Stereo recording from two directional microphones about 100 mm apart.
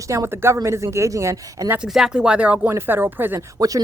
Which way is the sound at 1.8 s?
5° right (ahead or behind).